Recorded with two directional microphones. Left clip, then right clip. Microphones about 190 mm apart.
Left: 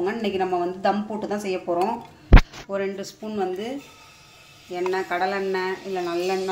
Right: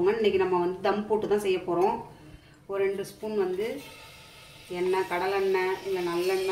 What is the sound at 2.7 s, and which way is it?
Speech, 40° left (ahead or behind).